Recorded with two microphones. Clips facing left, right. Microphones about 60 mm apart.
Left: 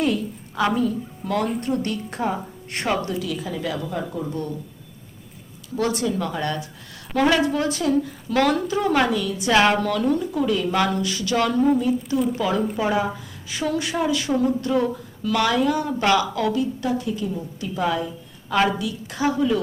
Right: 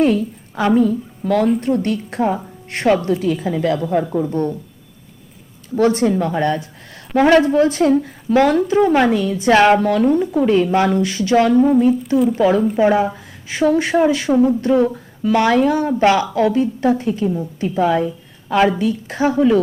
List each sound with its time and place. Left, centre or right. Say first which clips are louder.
0.0 s a woman's voice: right 7 dB; right
5.7 s speech: right 8 dB; right
8.4 s a woman's voice: right 7 dB; right
11.8 s speech: right 7 dB; right
18.4 s a woman's voice: right 5 dB; right
18.8 s speech: right 7 dB; right